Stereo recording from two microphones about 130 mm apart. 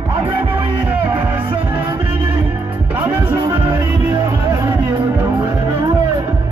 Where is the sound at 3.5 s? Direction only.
35° right (ahead or behind).